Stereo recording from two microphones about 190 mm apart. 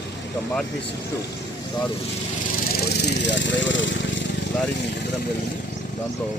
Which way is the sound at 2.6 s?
65° left (ahead or behind).